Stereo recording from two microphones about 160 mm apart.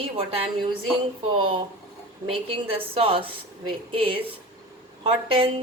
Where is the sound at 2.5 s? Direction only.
35° right (ahead or behind).